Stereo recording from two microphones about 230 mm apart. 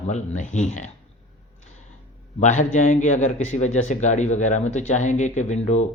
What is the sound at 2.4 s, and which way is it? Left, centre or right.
A man's voice, left.